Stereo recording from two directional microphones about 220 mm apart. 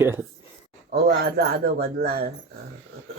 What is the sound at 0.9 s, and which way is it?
Speech, 45° right (ahead or behind).